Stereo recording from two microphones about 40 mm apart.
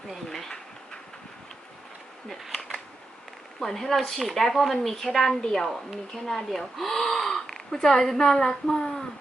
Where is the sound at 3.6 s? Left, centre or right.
Centre.